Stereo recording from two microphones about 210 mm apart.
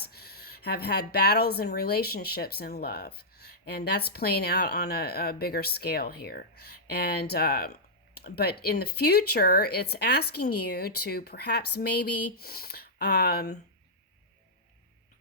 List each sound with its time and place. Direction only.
0.0 s speech: 50° left (ahead or behind)